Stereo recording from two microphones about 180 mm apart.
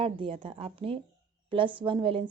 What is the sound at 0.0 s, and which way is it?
A woman's voice, 30° right (ahead or behind).